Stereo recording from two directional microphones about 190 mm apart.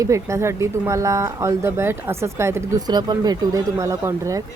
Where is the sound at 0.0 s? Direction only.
15° right (ahead or behind).